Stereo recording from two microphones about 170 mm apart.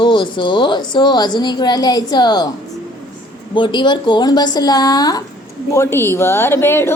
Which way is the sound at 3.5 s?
30° left (ahead or behind).